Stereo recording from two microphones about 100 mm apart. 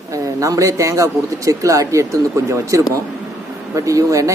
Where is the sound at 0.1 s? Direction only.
35° right (ahead or behind).